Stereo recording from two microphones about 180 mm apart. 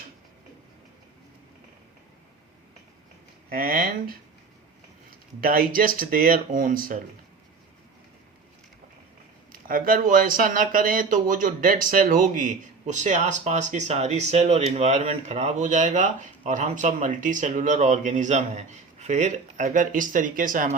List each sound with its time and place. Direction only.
3.5 s speech: 50° right (ahead or behind)
5.4 s speech: 50° right (ahead or behind)
9.5 s speech: 50° right (ahead or behind)